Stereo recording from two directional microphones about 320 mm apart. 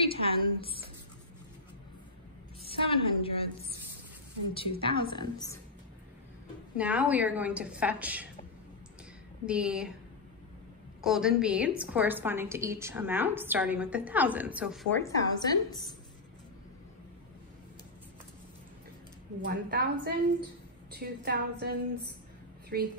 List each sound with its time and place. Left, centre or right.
0.0 s a woman's voice: centre
2.6 s a woman's voice: centre
4.6 s a woman's voice: centre
6.8 s a woman's voice: centre
9.5 s a woman's voice: centre
11.0 s a woman's voice: centre
19.4 s a woman's voice: right